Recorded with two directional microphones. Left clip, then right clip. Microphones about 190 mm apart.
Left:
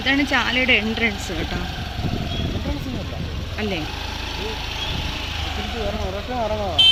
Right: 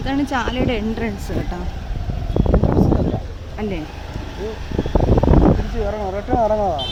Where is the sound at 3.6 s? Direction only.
25° right (ahead or behind).